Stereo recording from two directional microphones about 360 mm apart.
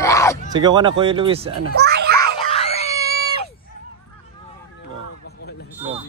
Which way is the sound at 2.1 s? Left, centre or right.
Centre.